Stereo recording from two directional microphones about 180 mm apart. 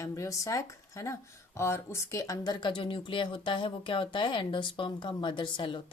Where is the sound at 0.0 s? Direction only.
20° left (ahead or behind).